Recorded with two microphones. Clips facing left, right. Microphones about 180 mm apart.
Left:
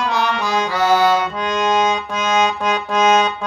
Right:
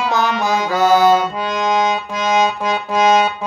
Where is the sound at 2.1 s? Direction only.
10° right (ahead or behind).